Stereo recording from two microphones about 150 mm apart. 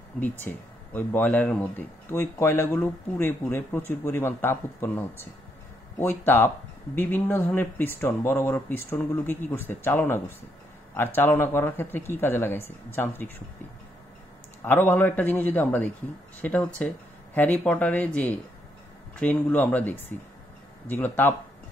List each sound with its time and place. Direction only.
0.2 s speech: 15° left (ahead or behind)
14.6 s speech: 10° left (ahead or behind)